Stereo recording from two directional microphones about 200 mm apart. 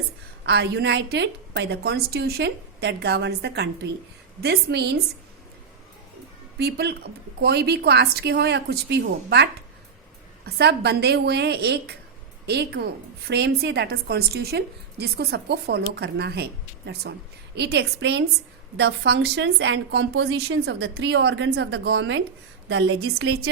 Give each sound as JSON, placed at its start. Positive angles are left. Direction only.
{"t": 0.4, "sound": "a woman's voice", "side_deg": -55}
{"t": 6.6, "sound": "a woman's voice", "side_deg": -55}
{"t": 22.7, "sound": "a woman's voice", "side_deg": -75}
{"t": 23.2, "sound": "speech", "side_deg": -90}